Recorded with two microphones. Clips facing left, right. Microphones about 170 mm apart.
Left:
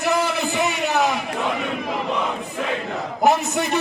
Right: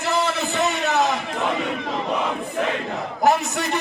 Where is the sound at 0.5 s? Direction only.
15° left (ahead or behind).